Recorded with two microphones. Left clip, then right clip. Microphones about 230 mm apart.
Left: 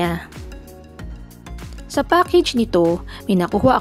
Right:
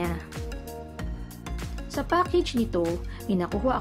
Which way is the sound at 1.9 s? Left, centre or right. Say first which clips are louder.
Left 9 dB; left.